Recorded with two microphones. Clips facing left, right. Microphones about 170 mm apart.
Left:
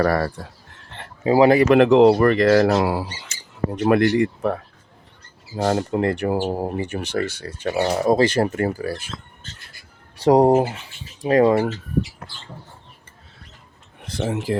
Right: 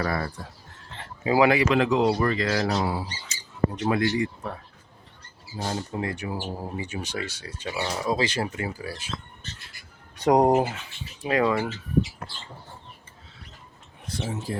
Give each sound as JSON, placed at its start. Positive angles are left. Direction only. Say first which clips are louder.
{"t": 0.0, "sound": "speech", "louder": "left 8 dB", "side_deg": 70}
{"t": 0.9, "sound": "a sound", "louder": "left 3 dB", "side_deg": 60}
{"t": 1.2, "sound": "speech", "louder": "left 6 dB", "side_deg": 35}
{"t": 1.5, "sound": "speech", "louder": "left 9 dB", "side_deg": 60}
{"t": 2.7, "sound": "speech", "louder": "left 7 dB", "side_deg": 75}
{"t": 5.5, "sound": "speech", "louder": "left 10 dB", "side_deg": 80}
{"t": 10.2, "sound": "speech", "louder": "left 5 dB", "side_deg": 30}
{"t": 14.0, "sound": "speech", "louder": "left 7 dB", "side_deg": 85}